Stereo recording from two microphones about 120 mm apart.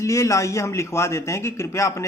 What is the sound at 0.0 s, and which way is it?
A man's voice, 25° left (ahead or behind).